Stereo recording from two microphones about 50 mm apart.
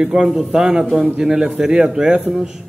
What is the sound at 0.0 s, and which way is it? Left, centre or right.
Speech, centre.